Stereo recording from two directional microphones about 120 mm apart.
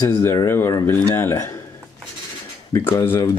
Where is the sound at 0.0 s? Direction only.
20° left (ahead or behind).